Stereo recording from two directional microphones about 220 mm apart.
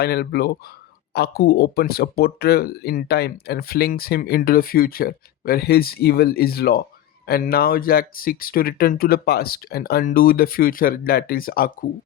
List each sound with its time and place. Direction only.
0.0 s speech: 45° left (ahead or behind)